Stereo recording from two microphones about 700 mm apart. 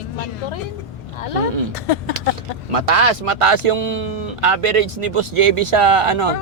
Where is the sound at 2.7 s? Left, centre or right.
Right.